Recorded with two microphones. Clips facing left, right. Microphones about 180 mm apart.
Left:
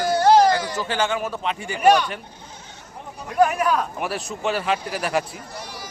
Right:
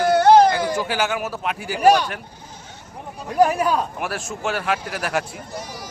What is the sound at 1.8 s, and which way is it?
Speech, 35° right (ahead or behind).